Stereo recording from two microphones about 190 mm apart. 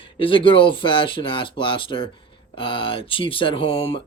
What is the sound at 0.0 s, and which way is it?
Speech, 25° left (ahead or behind).